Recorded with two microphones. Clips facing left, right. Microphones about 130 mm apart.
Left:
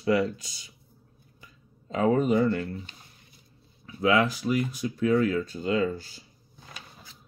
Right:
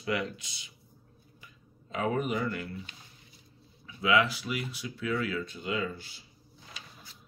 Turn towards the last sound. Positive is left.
turn(degrees=50)  # may be behind; listen again after turning